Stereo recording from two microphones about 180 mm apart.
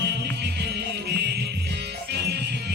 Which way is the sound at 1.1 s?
65° right (ahead or behind).